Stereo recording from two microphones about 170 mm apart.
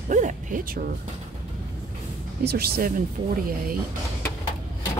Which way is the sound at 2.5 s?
65° right (ahead or behind).